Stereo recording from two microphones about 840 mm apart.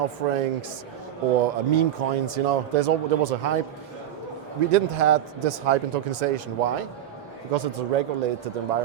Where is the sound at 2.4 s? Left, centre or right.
Right.